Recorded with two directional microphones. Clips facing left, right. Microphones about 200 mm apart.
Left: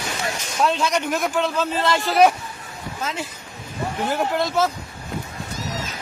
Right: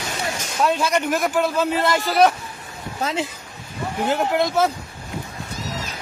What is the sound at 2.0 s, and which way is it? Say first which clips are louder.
Speech: left 1 dB; 5° left (ahead or behind).